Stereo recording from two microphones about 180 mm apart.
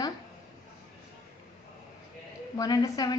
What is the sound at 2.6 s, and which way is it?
Speech, 20° left (ahead or behind).